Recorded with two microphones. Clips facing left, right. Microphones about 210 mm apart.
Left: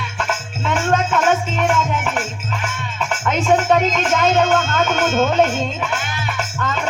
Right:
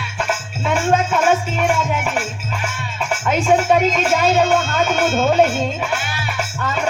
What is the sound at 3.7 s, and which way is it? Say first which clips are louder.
Speech: right 1 dB; 10° right (ahead or behind).